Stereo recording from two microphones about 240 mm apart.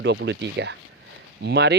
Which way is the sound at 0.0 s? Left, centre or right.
Right.